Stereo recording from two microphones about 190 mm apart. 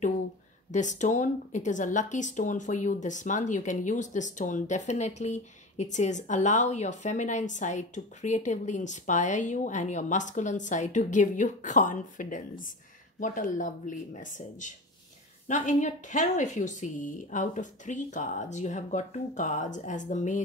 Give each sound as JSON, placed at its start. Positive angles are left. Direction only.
{"t": 0.7, "sound": "speech", "side_deg": 40}